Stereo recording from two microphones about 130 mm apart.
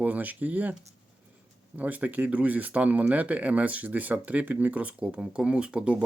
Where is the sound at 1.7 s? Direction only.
15° right (ahead or behind).